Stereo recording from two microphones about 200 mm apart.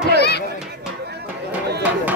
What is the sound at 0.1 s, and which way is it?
Music, 55° left (ahead or behind).